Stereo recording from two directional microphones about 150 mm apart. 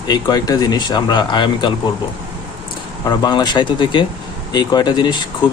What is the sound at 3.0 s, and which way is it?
Speech, 25° left (ahead or behind).